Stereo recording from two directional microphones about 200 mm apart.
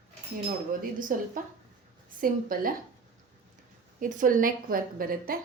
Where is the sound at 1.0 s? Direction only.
40° right (ahead or behind).